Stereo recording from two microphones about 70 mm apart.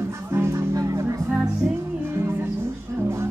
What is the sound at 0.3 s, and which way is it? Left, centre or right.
Music, right.